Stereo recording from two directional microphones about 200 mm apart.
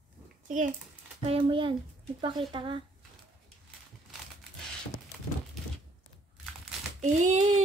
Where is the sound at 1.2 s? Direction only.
25° right (ahead or behind).